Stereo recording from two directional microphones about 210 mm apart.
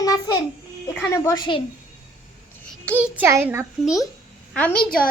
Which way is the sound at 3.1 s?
10° right (ahead or behind).